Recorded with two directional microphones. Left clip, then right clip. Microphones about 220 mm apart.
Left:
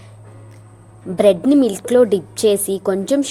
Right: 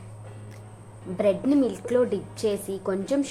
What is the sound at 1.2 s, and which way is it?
A woman's voice, 35° left (ahead or behind).